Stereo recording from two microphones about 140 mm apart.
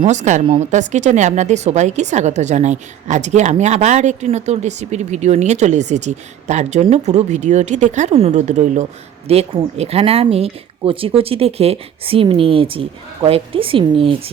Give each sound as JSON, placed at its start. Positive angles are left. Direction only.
{"t": 0.0, "sound": "speech", "side_deg": -60}
{"t": 0.4, "sound": "speech", "side_deg": -40}
{"t": 0.7, "sound": "speech", "side_deg": -60}